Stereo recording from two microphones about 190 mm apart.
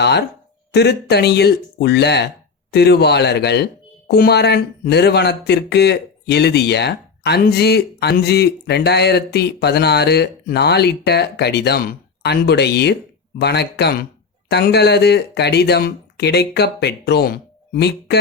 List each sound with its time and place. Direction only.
0.0 s speech: 60° left (ahead or behind)